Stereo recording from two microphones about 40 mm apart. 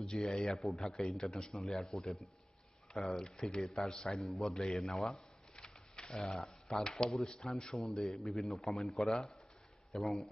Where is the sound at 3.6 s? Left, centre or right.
Centre.